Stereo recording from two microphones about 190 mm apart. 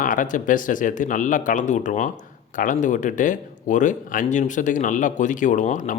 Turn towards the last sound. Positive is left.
turn(degrees=40)  # may be behind; listen again after turning